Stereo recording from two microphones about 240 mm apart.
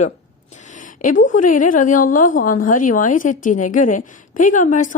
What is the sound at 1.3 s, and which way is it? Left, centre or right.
A woman's voice, left.